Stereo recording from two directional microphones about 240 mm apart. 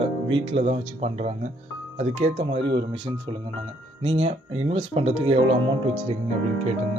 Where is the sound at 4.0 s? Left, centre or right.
Right.